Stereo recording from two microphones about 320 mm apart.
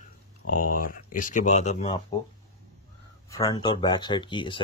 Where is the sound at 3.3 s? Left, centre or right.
Centre.